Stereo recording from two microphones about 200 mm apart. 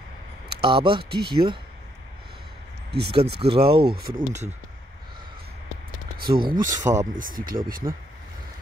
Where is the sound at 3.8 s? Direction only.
50° right (ahead or behind).